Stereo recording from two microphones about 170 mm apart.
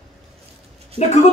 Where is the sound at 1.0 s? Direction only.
40° left (ahead or behind).